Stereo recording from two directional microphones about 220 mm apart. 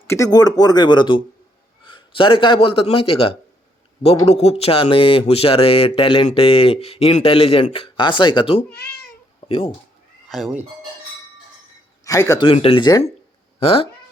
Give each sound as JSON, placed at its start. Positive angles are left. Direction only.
{"t": 0.1, "sound": "a man's voice", "side_deg": 15}
{"t": 10.2, "sound": "speech", "side_deg": 0}
{"t": 12.0, "sound": "speech", "side_deg": 15}